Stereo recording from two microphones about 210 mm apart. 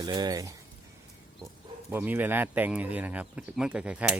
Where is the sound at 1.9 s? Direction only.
10° right (ahead or behind).